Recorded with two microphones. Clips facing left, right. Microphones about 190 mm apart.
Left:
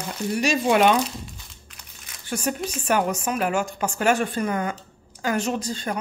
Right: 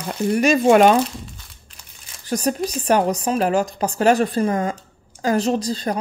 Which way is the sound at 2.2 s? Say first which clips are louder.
Right 5 dB; 35° right (ahead or behind).